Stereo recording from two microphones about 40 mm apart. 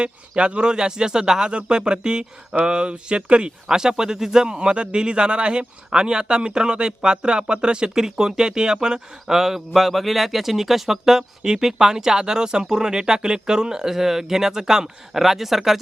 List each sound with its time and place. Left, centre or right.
0.0 s speech: right
7.9 s speech: centre